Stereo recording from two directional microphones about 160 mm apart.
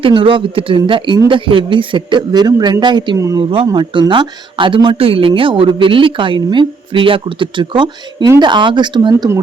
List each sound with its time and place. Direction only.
0.0 s speech: 35° right (ahead or behind)